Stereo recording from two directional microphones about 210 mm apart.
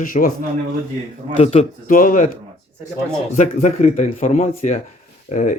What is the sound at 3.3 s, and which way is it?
Speech, 35° left (ahead or behind).